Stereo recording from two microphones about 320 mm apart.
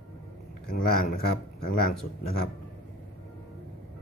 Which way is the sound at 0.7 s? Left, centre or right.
Left.